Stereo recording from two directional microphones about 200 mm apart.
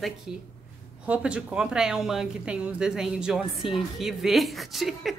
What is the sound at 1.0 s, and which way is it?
Speech, 5° right (ahead or behind).